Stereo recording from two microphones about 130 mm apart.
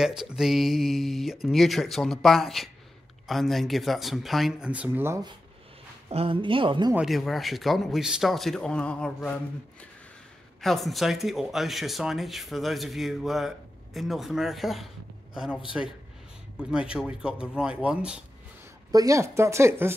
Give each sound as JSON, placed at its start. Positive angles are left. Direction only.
{"t": 0.0, "sound": "speech", "side_deg": -5}
{"t": 6.0, "sound": "a woman's voice", "side_deg": -45}
{"t": 7.0, "sound": "speech", "side_deg": 0}
{"t": 10.6, "sound": "a man's voice", "side_deg": 0}
{"t": 18.9, "sound": "speech", "side_deg": -25}